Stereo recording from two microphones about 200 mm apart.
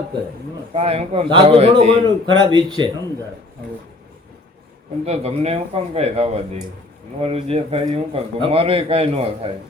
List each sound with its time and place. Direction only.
0.7 s a man's voice: 30° right (ahead or behind)
5.0 s a man's voice: 30° right (ahead or behind)